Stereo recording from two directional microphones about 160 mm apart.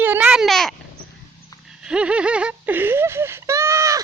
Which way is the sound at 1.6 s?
5° right (ahead or behind).